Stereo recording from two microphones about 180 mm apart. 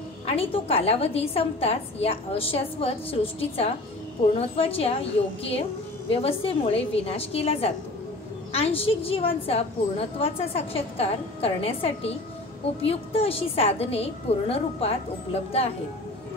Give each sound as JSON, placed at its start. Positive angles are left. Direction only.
{"t": 0.3, "sound": "a woman's voice", "side_deg": 30}
{"t": 6.0, "sound": "a woman's voice", "side_deg": 30}